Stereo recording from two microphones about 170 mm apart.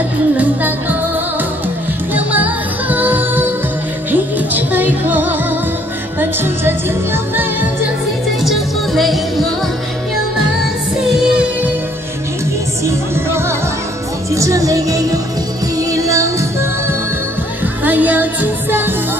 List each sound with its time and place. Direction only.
0.4 s music: 10° right (ahead or behind)
2.1 s music: 10° right (ahead or behind)
8.4 s music: centre (ahead or behind)
11.3 s music: 5° right (ahead or behind)
12.8 s music: 15° right (ahead or behind)
17.8 s music: 10° right (ahead or behind)